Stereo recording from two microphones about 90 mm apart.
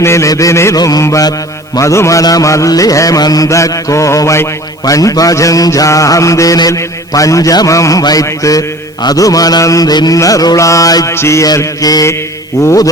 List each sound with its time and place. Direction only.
0.0 s mantra: 30° left (ahead or behind)
9.0 s a sound: 40° left (ahead or behind)
10.2 s mantra: 40° left (ahead or behind)
11.1 s mantra: 30° left (ahead or behind)
11.4 s a sound: 45° left (ahead or behind)
12.6 s mantra: 40° left (ahead or behind)